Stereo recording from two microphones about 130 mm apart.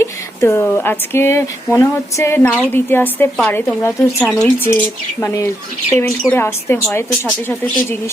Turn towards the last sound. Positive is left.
turn(degrees=15)  # may be behind; listen again after turning